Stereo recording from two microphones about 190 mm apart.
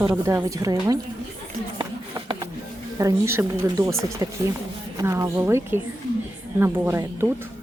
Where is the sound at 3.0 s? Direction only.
15° right (ahead or behind).